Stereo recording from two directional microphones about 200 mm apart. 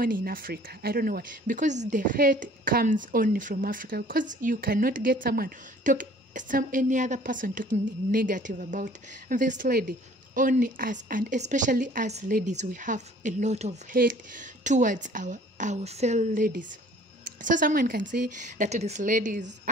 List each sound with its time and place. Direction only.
0.0 s speech: 45° right (ahead or behind)